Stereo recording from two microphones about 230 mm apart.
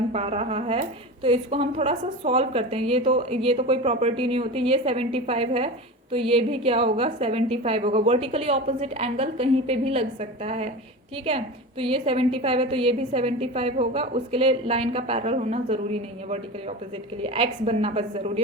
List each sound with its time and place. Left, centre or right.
0.1 s a woman's voice: right